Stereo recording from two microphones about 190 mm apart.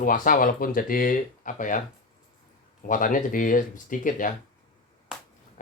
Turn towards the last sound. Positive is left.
turn(degrees=45)  # may be behind; listen again after turning